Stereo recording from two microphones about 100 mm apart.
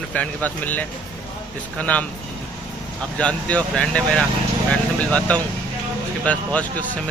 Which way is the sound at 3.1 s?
10° left (ahead or behind).